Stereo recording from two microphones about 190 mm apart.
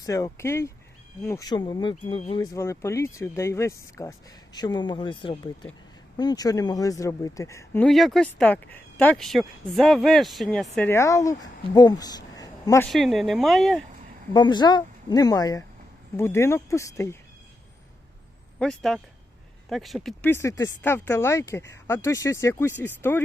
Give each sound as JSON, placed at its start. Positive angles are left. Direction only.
{"t": 0.0, "sound": "speech", "side_deg": 15}
{"t": 2.4, "sound": "speech", "side_deg": 15}
{"t": 12.9, "sound": "speech", "side_deg": 0}
{"t": 14.3, "sound": "speech", "side_deg": 25}
{"t": 18.6, "sound": "speech", "side_deg": 0}